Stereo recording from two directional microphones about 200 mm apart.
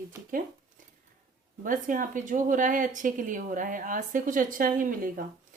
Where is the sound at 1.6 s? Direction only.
40° right (ahead or behind).